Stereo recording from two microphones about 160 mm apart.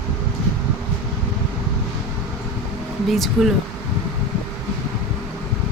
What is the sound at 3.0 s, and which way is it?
Speech, centre (ahead or behind).